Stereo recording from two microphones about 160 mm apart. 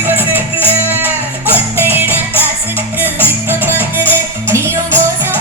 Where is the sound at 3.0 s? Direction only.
10° right (ahead or behind).